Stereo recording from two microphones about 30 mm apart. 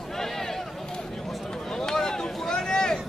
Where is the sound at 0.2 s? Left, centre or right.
Centre.